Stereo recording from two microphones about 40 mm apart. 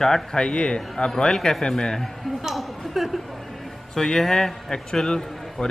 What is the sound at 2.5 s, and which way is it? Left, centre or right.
Speech, centre.